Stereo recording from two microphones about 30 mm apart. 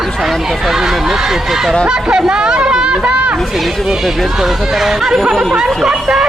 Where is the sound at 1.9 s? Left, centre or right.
Right.